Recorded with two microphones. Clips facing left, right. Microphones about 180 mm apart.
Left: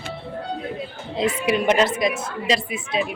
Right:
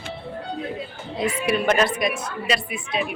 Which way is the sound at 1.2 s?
20° left (ahead or behind).